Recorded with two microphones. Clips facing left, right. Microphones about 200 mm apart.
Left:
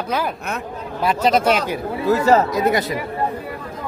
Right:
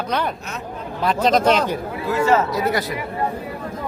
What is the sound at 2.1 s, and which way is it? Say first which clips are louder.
Speech: left 3 dB; 35° left (ahead or behind).